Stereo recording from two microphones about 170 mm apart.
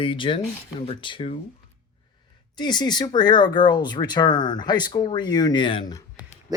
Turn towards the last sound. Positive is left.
turn(degrees=25)  # may be behind; listen again after turning